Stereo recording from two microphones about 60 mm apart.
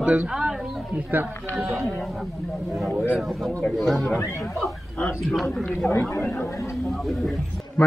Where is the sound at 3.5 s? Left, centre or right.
Left.